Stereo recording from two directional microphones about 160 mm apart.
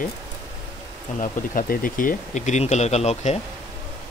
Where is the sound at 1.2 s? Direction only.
60° left (ahead or behind); by 3.4 s 40° left (ahead or behind).